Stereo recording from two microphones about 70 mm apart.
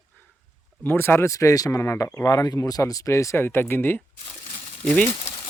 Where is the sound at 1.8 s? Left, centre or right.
Left.